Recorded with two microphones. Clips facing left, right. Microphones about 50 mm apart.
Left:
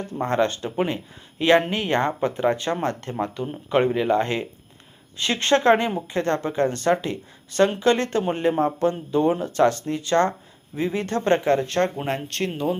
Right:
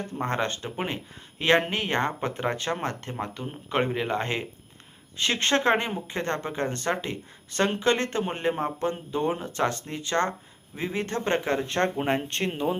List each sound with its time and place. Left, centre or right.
0.1 s a woman's voice: right